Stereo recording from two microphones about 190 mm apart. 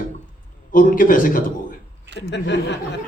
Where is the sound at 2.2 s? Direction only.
65° left (ahead or behind).